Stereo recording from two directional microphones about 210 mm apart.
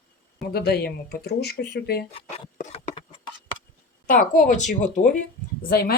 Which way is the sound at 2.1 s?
30° left (ahead or behind).